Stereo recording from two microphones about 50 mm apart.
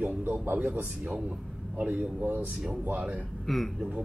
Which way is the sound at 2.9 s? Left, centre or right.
Right.